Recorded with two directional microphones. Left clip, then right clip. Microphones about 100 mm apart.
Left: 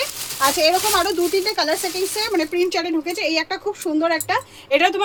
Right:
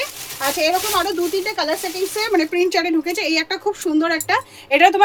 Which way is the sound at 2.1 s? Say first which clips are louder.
Right 4 dB; 45° right (ahead or behind).